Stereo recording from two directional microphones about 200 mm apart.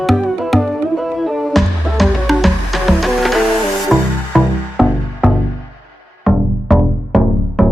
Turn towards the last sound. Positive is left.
turn(degrees=0)  # may be behind; listen again after turning